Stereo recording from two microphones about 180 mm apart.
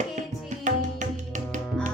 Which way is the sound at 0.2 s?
45° right (ahead or behind).